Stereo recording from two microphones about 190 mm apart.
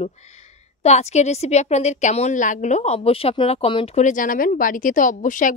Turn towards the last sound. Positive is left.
turn(degrees=45)  # may be behind; listen again after turning